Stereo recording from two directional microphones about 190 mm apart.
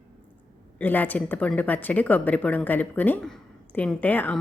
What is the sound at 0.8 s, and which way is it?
A woman's voice, 10° left (ahead or behind).